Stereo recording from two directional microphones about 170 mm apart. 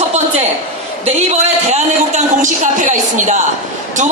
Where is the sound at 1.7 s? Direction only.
45° right (ahead or behind).